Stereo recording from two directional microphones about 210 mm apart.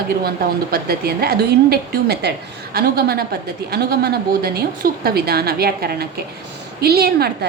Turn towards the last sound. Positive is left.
turn(degrees=-50)  # may be behind; listen again after turning